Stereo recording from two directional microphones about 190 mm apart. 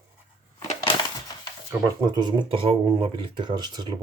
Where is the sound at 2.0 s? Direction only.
20° right (ahead or behind).